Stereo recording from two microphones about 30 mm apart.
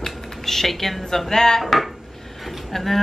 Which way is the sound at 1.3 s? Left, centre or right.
Centre.